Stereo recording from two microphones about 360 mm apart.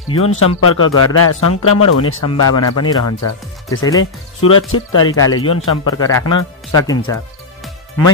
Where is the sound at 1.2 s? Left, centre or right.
Left.